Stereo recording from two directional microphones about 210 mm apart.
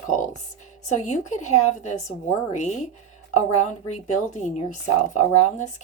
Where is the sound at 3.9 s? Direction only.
35° left (ahead or behind).